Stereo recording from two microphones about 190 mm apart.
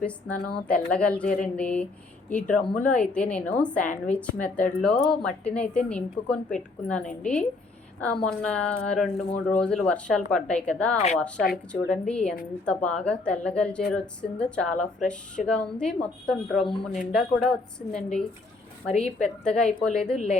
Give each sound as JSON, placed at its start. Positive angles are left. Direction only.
{"t": 0.0, "sound": "a woman's voice", "side_deg": 5}
{"t": 10.9, "sound": "a woman's voice", "side_deg": 35}
{"t": 11.5, "sound": "a woman's voice", "side_deg": 5}
{"t": 18.9, "sound": "a woman's voice", "side_deg": 35}
{"t": 19.5, "sound": "a woman's voice", "side_deg": 5}